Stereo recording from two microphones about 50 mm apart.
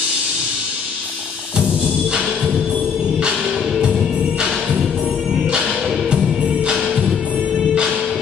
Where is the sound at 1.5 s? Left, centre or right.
Right; by 3.8 s centre.